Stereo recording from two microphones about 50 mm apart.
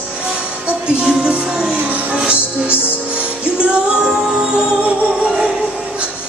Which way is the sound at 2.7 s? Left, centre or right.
Left.